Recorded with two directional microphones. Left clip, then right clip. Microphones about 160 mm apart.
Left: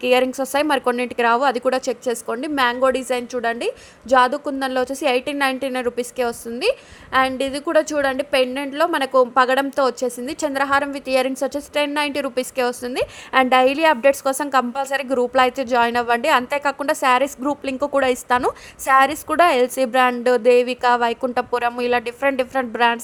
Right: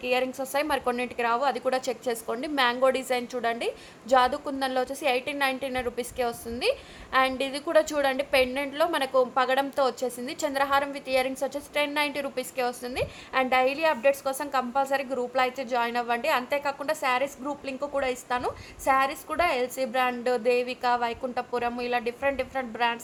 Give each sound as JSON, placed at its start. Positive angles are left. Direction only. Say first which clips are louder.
{"t": 0.0, "sound": "a woman's voice", "louder": "left 9 dB", "side_deg": 45}